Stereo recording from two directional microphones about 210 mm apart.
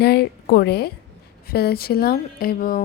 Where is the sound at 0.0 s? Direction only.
50° left (ahead or behind).